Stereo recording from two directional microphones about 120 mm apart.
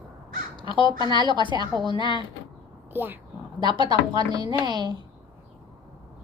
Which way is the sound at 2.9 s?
15° right (ahead or behind).